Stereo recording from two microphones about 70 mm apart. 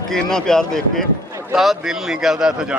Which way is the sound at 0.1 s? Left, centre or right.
Centre.